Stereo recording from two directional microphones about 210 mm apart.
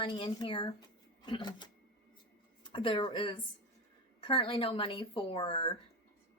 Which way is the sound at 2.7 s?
25° left (ahead or behind).